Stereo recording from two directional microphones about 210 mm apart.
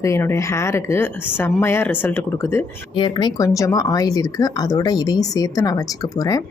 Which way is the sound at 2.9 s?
20° left (ahead or behind).